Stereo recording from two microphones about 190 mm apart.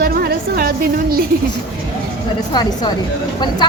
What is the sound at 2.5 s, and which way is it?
Speech, 20° left (ahead or behind).